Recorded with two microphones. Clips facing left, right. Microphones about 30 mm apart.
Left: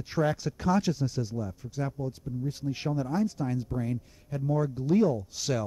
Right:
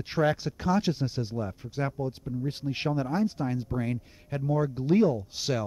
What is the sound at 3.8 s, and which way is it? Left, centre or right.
Speech, right.